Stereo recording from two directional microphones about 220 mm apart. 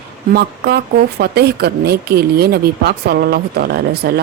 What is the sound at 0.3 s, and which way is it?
Speech, 45° right (ahead or behind).